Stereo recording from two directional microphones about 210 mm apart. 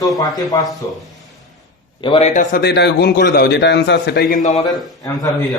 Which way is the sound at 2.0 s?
25° left (ahead or behind).